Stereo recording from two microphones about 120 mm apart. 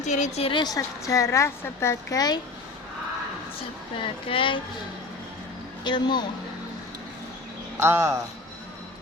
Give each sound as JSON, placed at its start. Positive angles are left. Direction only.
{"t": 0.0, "sound": "a woman's voice", "side_deg": 75}
{"t": 0.4, "sound": "a woman's voice", "side_deg": 40}
{"t": 4.0, "sound": "speech", "side_deg": 45}
{"t": 5.8, "sound": "speech", "side_deg": 40}
{"t": 7.8, "sound": "speech", "side_deg": -20}